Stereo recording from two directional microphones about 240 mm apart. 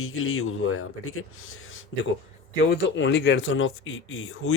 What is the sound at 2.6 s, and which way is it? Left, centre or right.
Speech, left.